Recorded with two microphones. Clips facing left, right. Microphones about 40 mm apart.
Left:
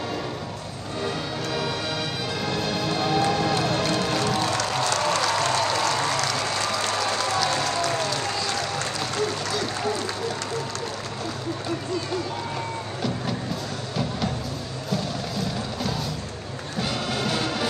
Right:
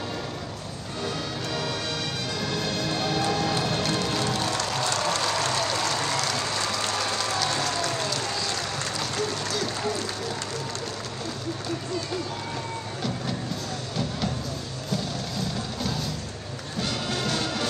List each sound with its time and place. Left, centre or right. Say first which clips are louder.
1.0 s music: left 2 dB; centre
3.9 s music: left 3 dB; centre
4.9 s applause: left 4 dB; left
16.8 s music: left 2 dB; centre